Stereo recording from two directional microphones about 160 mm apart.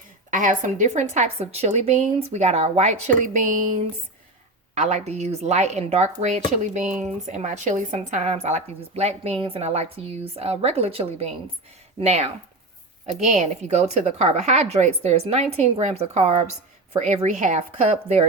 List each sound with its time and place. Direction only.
0.3 s a woman's voice: 50° right (ahead or behind)
4.7 s a woman's voice: 45° right (ahead or behind)